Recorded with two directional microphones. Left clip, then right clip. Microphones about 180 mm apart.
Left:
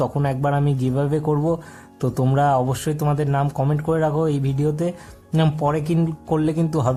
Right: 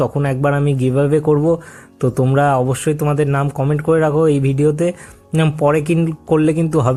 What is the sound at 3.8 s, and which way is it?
Speech, 15° right (ahead or behind).